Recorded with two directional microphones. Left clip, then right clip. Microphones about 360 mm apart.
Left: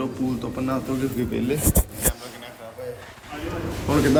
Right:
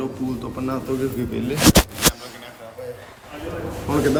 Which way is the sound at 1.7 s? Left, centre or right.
Centre.